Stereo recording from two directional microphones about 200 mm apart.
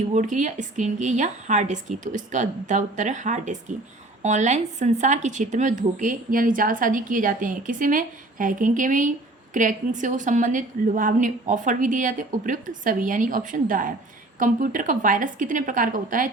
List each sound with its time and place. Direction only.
0.1 s speech: 35° right (ahead or behind)